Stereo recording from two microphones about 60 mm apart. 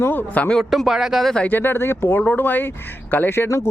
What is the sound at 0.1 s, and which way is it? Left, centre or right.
Speech, left.